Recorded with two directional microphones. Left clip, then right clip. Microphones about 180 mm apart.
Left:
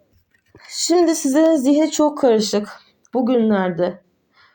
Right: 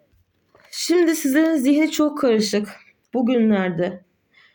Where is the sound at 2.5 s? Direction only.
35° right (ahead or behind).